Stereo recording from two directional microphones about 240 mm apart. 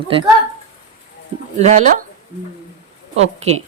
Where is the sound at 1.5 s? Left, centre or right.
Right.